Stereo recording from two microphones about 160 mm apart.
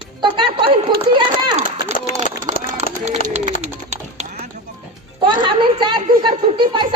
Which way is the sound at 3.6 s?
45° right (ahead or behind).